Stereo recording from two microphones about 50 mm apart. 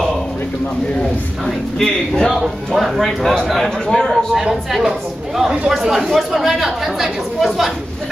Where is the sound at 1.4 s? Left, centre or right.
Centre.